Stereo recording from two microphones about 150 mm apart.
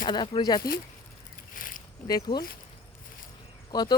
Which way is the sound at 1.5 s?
65° left (ahead or behind).